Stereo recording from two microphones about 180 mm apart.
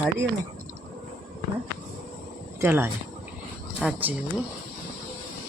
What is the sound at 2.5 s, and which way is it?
Speech, 10° right (ahead or behind).